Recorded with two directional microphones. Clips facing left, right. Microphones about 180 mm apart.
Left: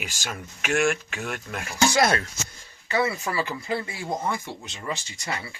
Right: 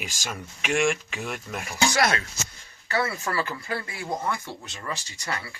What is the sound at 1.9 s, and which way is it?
Speech, 30° left (ahead or behind).